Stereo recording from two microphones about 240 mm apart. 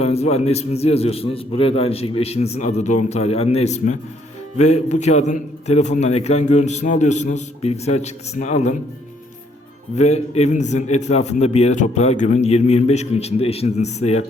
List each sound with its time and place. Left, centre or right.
0.0 s a man's voice: left
9.9 s a man's voice: left